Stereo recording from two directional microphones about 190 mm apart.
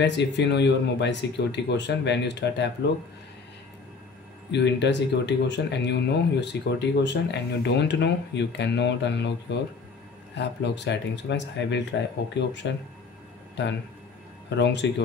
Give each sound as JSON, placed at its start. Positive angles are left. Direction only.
{"t": 0.0, "sound": "speech", "side_deg": 65}
{"t": 4.5, "sound": "speech", "side_deg": 65}